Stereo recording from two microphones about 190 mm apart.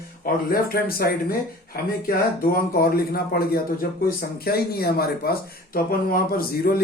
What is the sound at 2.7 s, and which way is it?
Speech, 55° left (ahead or behind).